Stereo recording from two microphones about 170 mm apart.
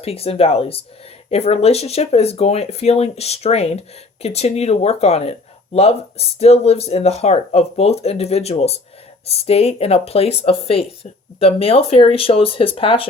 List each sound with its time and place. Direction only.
0.0 s speech: 35° left (ahead or behind)